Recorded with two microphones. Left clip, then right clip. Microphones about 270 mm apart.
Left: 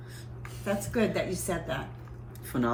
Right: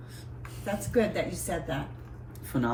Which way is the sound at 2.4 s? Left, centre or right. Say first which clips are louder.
Even; centre.